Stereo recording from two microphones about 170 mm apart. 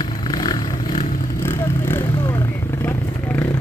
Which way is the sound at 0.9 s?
50° left (ahead or behind).